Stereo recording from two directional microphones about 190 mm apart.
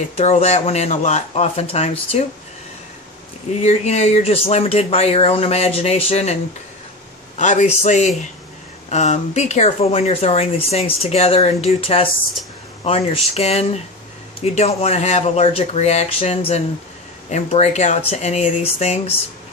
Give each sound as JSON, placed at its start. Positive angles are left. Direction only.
{"t": 0.2, "sound": "speech", "side_deg": 35}
{"t": 3.6, "sound": "speech", "side_deg": 35}
{"t": 7.3, "sound": "speech", "side_deg": 40}